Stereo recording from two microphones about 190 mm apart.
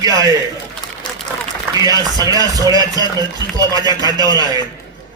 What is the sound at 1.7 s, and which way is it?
A man's voice, 20° right (ahead or behind).